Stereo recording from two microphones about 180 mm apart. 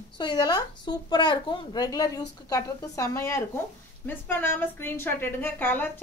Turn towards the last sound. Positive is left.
turn(degrees=10)  # may be behind; listen again after turning